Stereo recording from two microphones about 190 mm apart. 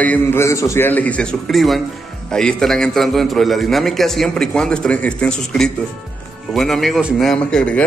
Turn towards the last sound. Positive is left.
turn(degrees=5)  # may be behind; listen again after turning